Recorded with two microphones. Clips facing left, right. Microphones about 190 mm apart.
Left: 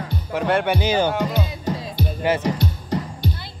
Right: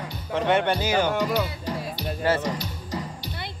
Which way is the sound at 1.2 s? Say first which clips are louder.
Left 1 dB; 50° left (ahead or behind).